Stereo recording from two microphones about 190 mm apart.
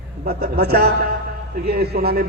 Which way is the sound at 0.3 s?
55° right (ahead or behind).